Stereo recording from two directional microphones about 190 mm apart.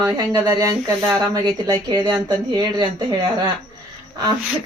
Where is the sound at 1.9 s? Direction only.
20° right (ahead or behind).